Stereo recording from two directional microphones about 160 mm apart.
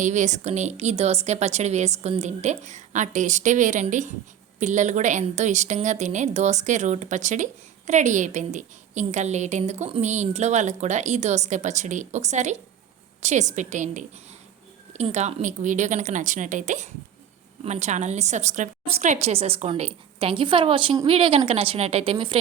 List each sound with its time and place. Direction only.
0.0 s a woman's voice: 50° right (ahead or behind); by 22.4 s 35° right (ahead or behind)